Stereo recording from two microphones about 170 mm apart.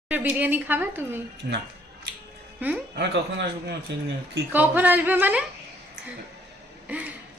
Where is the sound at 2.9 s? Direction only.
80° right.